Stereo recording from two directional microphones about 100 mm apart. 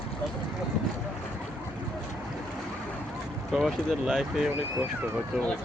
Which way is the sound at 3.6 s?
5° right (ahead or behind).